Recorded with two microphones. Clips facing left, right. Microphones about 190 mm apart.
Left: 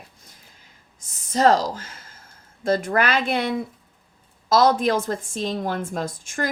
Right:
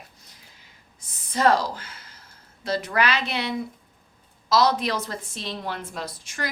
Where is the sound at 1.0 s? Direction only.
45° left (ahead or behind).